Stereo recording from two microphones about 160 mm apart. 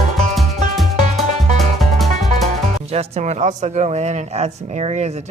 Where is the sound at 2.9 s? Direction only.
40° right (ahead or behind).